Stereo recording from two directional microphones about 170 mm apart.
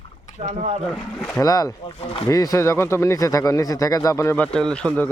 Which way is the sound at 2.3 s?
20° left (ahead or behind).